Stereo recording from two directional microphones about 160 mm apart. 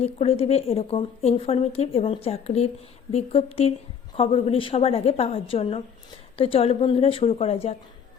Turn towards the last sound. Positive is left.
turn(degrees=40)  # may be behind; listen again after turning